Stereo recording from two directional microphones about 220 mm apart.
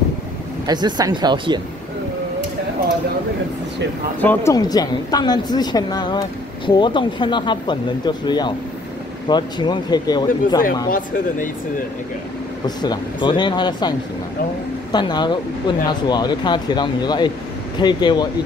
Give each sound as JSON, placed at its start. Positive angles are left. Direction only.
{"t": 0.7, "sound": "speech", "side_deg": -20}
{"t": 4.2, "sound": "a woman's voice", "side_deg": 10}
{"t": 10.9, "sound": "speech", "side_deg": 40}
{"t": 12.6, "sound": "a woman's voice", "side_deg": 20}